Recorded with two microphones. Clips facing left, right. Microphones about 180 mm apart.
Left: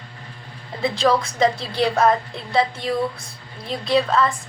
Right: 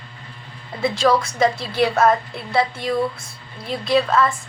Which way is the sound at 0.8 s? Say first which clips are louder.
Right 1 dB; 20° left (ahead or behind).